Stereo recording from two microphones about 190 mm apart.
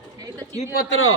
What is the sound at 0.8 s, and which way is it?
Speech, 90° left.